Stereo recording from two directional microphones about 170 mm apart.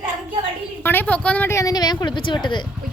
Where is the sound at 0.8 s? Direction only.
10° left (ahead or behind).